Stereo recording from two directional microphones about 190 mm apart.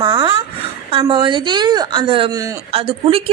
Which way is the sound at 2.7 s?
30° right (ahead or behind).